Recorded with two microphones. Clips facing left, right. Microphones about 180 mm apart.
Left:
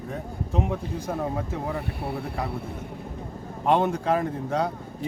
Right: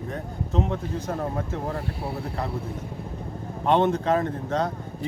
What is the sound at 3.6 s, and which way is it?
Speech, 10° left (ahead or behind).